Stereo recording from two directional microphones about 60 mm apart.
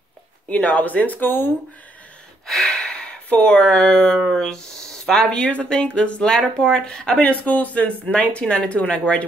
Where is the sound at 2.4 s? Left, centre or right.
Centre.